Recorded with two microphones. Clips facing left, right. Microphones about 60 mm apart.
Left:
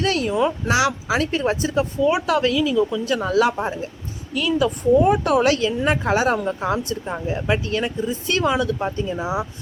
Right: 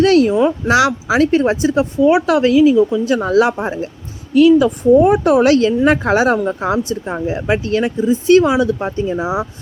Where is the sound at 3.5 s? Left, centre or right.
Right.